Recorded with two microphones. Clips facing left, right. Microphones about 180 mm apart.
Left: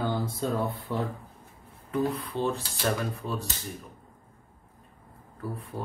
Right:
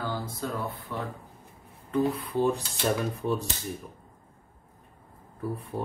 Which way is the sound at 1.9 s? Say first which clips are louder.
Right 2 dB; centre (ahead or behind).